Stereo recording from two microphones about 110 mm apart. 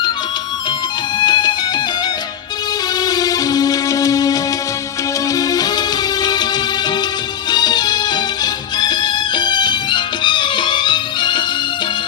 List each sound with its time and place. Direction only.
1.2 s music: 40° left (ahead or behind)
3.0 s music: 35° left (ahead or behind)
7.5 s music: 40° left (ahead or behind)